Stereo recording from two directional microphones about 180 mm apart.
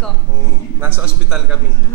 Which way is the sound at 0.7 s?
10° right (ahead or behind).